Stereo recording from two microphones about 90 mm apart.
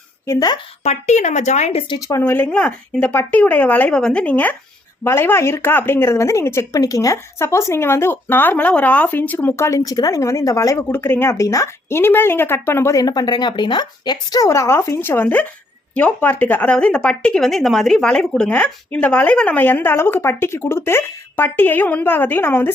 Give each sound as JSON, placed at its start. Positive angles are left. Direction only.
{"t": 2.0, "sound": "speech", "side_deg": 40}
{"t": 2.2, "sound": "speech", "side_deg": 20}
{"t": 5.0, "sound": "speech", "side_deg": 25}
{"t": 9.6, "sound": "speech", "side_deg": 35}
{"t": 10.8, "sound": "speech", "side_deg": 25}